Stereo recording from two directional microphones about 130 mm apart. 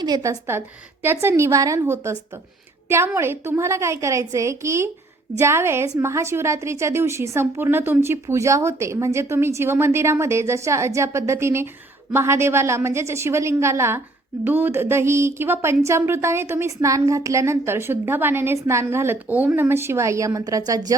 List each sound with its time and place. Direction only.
0.0 s a woman's voice: 25° right (ahead or behind)